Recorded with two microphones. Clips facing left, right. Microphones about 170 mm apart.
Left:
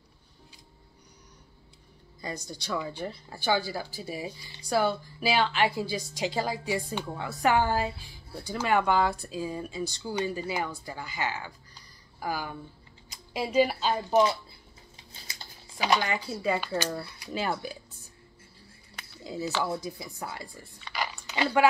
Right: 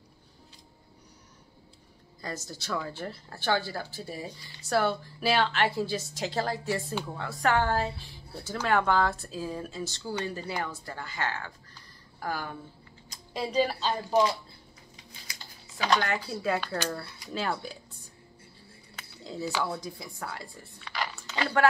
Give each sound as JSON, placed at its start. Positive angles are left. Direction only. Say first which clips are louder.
{"t": 2.2, "sound": "speech", "louder": "left 1 dB", "side_deg": -5}
{"t": 11.7, "sound": "a sound", "louder": "right 1 dB", "side_deg": 5}
{"t": 13.3, "sound": "a woman's voice", "louder": "left 3 dB", "side_deg": 5}
{"t": 15.3, "sound": "a sound", "louder": "left 2 dB", "side_deg": 25}
{"t": 15.8, "sound": "a woman's voice", "louder": "even", "side_deg": 10}
{"t": 16.2, "sound": "speech", "louder": "left 1 dB", "side_deg": 0}
{"t": 19.2, "sound": "speech", "louder": "left 1 dB", "side_deg": 0}
{"t": 21.1, "sound": "chewing", "louder": "left 2 dB", "side_deg": 15}